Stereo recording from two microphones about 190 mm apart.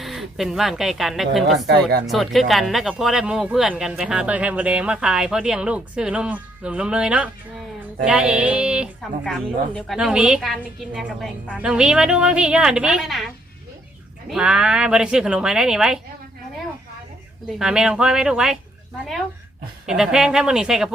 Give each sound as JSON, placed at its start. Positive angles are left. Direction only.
{"t": 0.0, "sound": "speech", "side_deg": 0}
{"t": 1.6, "sound": "speech", "side_deg": -60}
{"t": 2.0, "sound": "speech", "side_deg": 0}
{"t": 17.6, "sound": "speech", "side_deg": -5}
{"t": 19.9, "sound": "speech", "side_deg": -5}